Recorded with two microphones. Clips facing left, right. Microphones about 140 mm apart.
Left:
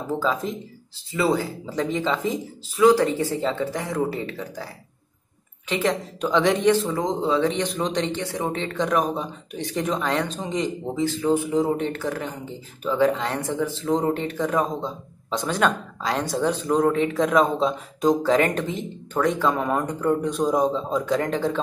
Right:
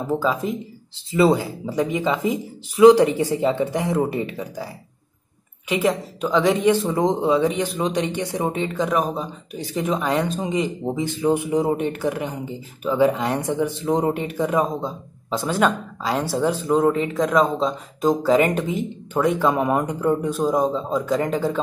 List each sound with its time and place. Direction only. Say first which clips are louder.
0.2 s speech: right 2 dB; 10° right (ahead or behind)
0.9 s speech: right 5 dB; 20° right (ahead or behind)
2.7 s speech: right 5 dB; 25° right (ahead or behind)
5.7 s speech: right 3 dB; 10° right (ahead or behind)
6.2 s speech: right 1 dB; centre (ahead or behind)
7.0 s speech: right 3 dB; 20° right (ahead or behind); by 21.5 s 5° right (ahead or behind)